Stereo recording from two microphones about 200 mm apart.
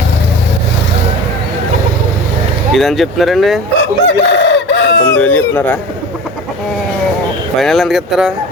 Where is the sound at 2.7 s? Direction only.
Centre (ahead or behind).